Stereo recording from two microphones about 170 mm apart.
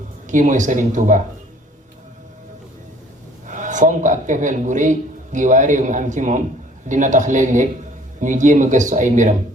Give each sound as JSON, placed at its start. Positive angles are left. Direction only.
{"t": 0.3, "sound": "speech", "side_deg": -50}
{"t": 3.4, "sound": "speech", "side_deg": -50}